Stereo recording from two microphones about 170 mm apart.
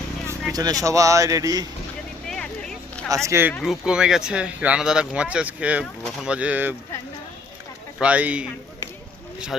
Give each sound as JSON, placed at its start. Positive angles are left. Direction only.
{"t": 0.3, "sound": "speech", "side_deg": -20}
{"t": 2.2, "sound": "a sound", "side_deg": 5}
{"t": 3.2, "sound": "speech", "side_deg": -15}
{"t": 3.6, "sound": "speech", "side_deg": -5}
{"t": 7.9, "sound": "speech", "side_deg": -5}